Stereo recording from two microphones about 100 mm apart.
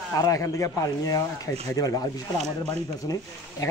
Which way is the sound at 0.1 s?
35° left (ahead or behind).